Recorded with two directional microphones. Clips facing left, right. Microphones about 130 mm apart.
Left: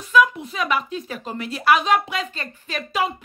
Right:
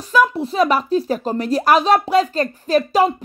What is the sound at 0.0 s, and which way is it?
A woman's voice, 35° right (ahead or behind).